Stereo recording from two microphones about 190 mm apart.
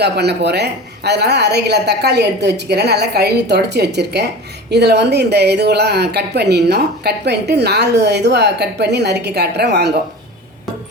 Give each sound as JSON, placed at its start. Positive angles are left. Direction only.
{"t": 0.0, "sound": "speech", "side_deg": -60}